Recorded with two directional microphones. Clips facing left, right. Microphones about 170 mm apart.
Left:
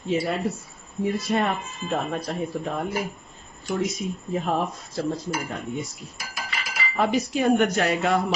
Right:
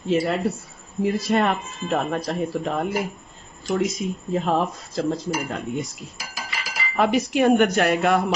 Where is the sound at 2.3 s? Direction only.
90° right.